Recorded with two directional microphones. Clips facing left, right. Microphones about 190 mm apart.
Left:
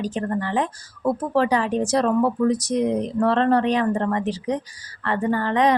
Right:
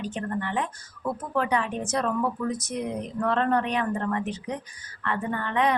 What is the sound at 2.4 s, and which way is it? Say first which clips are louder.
Speech: left 9 dB; 90° left.